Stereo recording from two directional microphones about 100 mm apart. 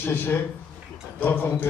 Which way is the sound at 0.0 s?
20° left (ahead or behind).